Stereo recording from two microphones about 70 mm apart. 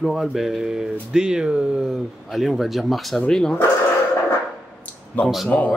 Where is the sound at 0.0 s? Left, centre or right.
Centre.